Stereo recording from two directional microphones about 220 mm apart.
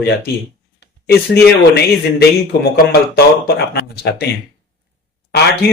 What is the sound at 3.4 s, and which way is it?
Speech, 45° left (ahead or behind).